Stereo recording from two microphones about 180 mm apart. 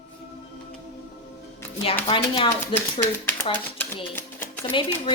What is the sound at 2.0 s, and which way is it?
Speech, 30° left (ahead or behind).